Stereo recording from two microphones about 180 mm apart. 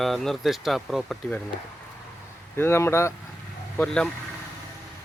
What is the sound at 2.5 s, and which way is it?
Speech, 15° left (ahead or behind).